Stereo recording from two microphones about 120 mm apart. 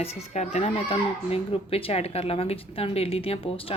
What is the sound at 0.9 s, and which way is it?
A woman's voice, 55° left (ahead or behind).